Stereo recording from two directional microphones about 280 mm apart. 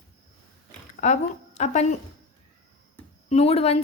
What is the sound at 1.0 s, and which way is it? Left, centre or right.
Speech, left.